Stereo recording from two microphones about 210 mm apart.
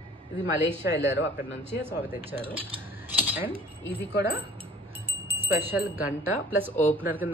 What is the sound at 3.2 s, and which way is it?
Cutlery, 10° right (ahead or behind).